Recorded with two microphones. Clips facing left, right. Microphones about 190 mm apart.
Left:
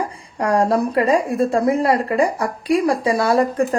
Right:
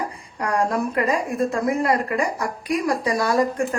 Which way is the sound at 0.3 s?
35° left (ahead or behind).